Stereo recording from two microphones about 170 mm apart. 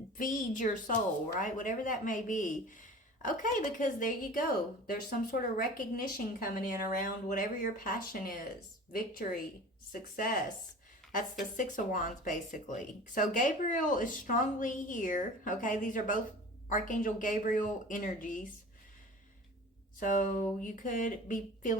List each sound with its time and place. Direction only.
0.2 s a woman's voice: 50° left (ahead or behind)
11.5 s speech: 50° left (ahead or behind)
20.0 s speech: 50° left (ahead or behind)